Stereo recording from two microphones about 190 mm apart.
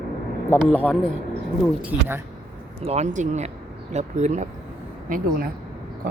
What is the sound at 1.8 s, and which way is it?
Speech, 10° right (ahead or behind).